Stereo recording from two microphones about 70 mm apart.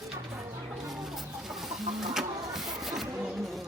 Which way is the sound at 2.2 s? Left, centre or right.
Centre.